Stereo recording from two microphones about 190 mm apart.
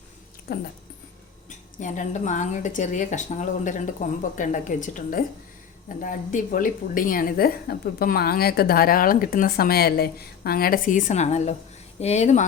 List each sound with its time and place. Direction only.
0.5 s a woman's voice: 55° left (ahead or behind)
1.5 s a woman's voice: 40° left (ahead or behind)